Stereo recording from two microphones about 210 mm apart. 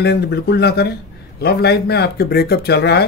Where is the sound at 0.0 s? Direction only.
50° left (ahead or behind).